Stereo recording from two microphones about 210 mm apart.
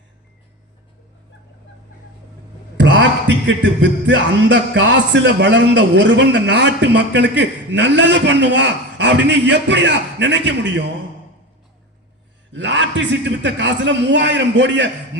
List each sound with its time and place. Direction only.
2.7 s speech: 60° right (ahead or behind)
12.5 s speech: 60° right (ahead or behind)